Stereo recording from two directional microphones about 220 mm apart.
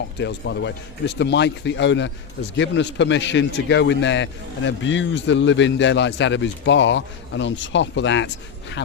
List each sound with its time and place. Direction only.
0.2 s a man's voice: 50° left (ahead or behind)